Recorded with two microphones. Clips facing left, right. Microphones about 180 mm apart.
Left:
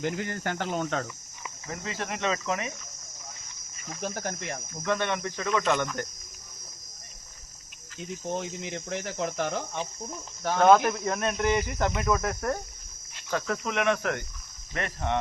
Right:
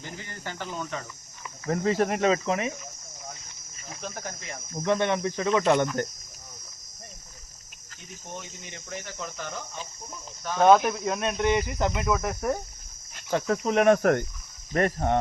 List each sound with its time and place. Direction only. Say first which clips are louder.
0.0 s speech: left 9 dB; 60° left (ahead or behind)
1.6 s cricket: right 11 dB; 45° right (ahead or behind)
4.0 s cricket: left 5 dB; 60° left (ahead or behind)
4.7 s speech: right 4 dB; 30° right (ahead or behind)
8.3 s speech: left 8 dB; 90° left
10.6 s cricket: right 1 dB; centre (ahead or behind)
11.1 s speech: right 1 dB; 25° right (ahead or behind)
11.5 s cricket: right 1 dB; 5° right (ahead or behind)
13.3 s cricket: right 5 dB; 25° right (ahead or behind); by 15.2 s 45° right (ahead or behind)